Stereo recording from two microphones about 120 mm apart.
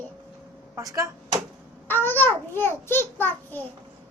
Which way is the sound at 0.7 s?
25° right (ahead or behind).